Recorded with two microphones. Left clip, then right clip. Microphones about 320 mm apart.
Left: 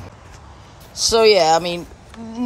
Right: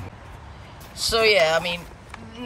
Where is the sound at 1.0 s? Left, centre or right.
Centre.